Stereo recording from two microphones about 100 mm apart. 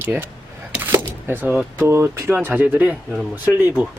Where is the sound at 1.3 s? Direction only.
20° right (ahead or behind).